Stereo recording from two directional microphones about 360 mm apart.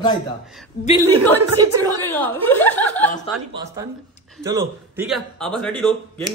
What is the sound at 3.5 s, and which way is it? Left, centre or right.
Speech, centre.